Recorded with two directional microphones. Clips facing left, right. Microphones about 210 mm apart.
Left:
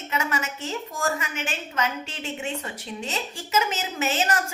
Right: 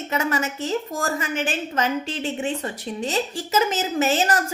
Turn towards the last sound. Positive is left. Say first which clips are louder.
# right 5 dB
turn(degrees=-35)  # may be behind; listen again after turning